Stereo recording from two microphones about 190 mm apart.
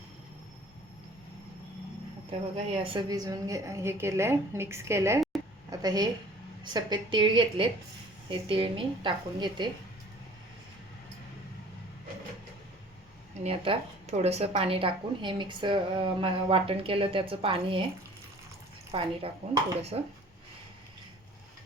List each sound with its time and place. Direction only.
2.6 s a woman's voice: 25° right (ahead or behind)
13.4 s a woman's voice: 30° right (ahead or behind)
18.9 s a woman's voice: 30° right (ahead or behind)